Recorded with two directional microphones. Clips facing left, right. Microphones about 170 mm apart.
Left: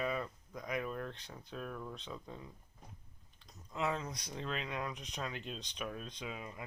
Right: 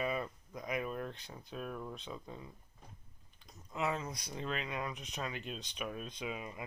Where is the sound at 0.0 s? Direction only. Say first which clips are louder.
Right 1 dB; 10° right (ahead or behind).